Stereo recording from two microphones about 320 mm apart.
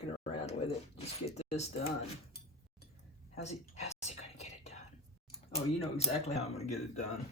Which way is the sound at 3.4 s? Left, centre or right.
Centre.